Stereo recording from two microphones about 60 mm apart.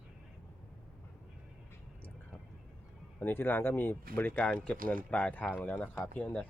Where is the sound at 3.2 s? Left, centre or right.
Left.